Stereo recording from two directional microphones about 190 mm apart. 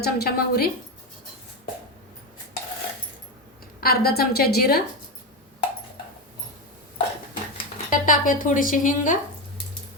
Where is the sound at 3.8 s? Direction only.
55° left (ahead or behind).